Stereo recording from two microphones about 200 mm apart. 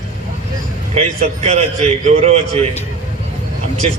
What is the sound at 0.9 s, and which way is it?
A man's voice, 35° right (ahead or behind).